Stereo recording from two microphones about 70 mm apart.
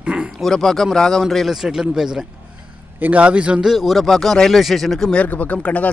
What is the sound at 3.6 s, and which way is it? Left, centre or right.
Speech, centre.